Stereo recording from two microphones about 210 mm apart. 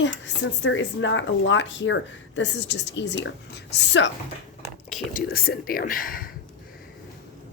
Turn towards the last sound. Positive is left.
turn(degrees=40)  # may be behind; listen again after turning